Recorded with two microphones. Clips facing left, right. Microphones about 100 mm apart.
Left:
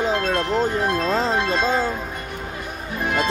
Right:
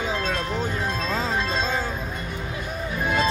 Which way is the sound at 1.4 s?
55° left (ahead or behind).